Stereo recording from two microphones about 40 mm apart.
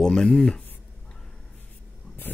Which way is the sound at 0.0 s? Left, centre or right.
Centre.